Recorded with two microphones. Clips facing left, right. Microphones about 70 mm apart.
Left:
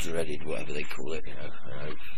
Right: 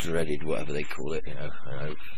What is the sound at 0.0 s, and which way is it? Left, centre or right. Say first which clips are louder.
Speech: right 4 dB; right.